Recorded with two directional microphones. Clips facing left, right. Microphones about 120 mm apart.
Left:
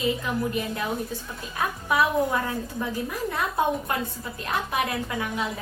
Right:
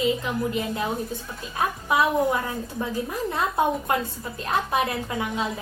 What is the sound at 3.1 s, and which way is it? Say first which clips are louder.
Music: right 2 dB; 25° right (ahead or behind).